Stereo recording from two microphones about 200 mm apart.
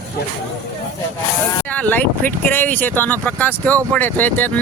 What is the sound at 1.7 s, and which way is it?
Speech, 5° left (ahead or behind).